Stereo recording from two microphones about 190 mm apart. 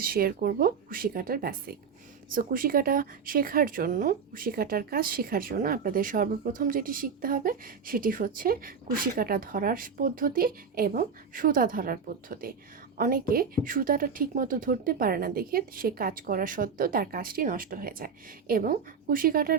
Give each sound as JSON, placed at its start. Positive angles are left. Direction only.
{"t": 0.0, "sound": "a woman's voice", "side_deg": -50}